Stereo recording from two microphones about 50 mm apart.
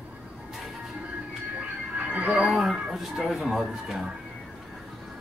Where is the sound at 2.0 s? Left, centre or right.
Right.